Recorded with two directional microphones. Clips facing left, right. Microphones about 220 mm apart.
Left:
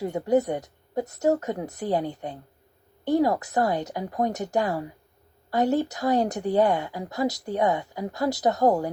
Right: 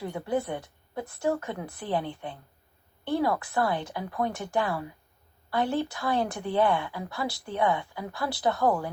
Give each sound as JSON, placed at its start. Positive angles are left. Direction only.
{"t": 0.2, "sound": "speech", "side_deg": 40}